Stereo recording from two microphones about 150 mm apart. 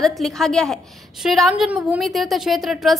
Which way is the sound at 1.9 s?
Centre (ahead or behind).